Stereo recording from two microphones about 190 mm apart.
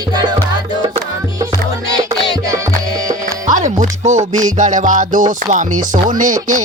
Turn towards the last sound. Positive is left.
turn(degrees=-45)  # may be behind; listen again after turning